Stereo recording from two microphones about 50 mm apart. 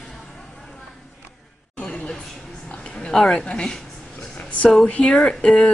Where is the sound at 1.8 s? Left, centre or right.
Left.